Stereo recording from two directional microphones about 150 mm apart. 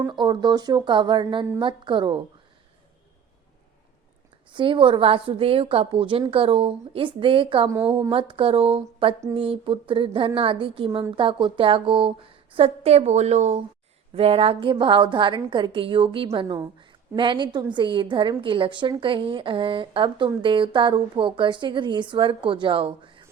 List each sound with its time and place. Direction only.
0.1 s a woman's voice: 30° right (ahead or behind)
4.5 s a woman's voice: 35° right (ahead or behind)